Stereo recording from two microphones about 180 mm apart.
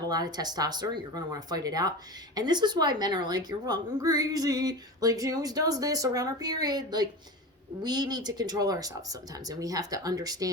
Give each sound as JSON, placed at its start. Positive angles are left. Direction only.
{"t": 0.1, "sound": "a woman's voice", "side_deg": -20}